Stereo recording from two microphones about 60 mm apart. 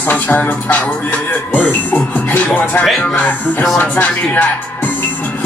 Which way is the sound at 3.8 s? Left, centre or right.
Left.